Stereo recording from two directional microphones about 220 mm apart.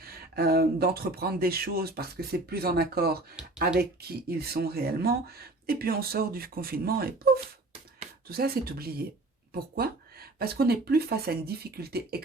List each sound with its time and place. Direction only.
0.0 s speech: 45° right (ahead or behind)
3.4 s speech: 5° right (ahead or behind)
3.8 s speech: 45° right (ahead or behind)